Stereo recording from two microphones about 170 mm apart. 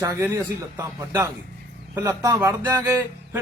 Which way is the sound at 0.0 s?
15° right (ahead or behind).